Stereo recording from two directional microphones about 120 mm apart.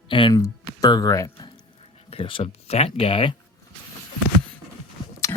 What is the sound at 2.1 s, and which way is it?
Speech, 50° left (ahead or behind).